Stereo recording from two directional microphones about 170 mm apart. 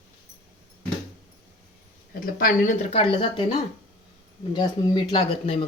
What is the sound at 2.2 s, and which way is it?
Speech, 55° left (ahead or behind).